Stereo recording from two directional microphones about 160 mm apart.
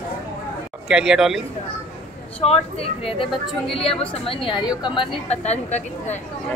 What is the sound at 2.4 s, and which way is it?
Speech, 40° left (ahead or behind).